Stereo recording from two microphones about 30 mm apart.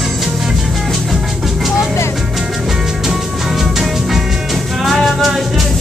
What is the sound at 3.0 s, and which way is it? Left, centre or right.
Music, centre.